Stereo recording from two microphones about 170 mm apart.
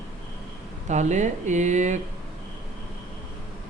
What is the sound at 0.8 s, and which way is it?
Speech, 45° right (ahead or behind).